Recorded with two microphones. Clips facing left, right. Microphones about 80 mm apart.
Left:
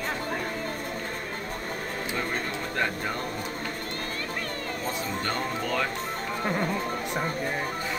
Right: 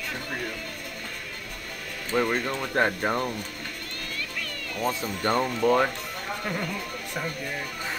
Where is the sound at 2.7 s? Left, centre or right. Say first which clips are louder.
Right 6 dB; right.